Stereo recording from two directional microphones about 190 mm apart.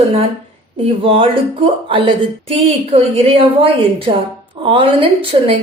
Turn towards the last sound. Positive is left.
turn(degrees=-30)  # may be behind; listen again after turning